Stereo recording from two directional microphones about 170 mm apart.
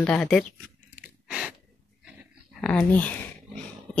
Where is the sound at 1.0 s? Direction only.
5° right (ahead or behind).